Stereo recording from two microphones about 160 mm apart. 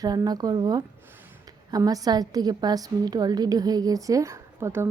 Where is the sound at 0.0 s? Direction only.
25° right (ahead or behind).